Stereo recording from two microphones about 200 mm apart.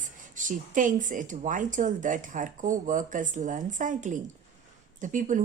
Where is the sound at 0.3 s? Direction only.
40° right (ahead or behind).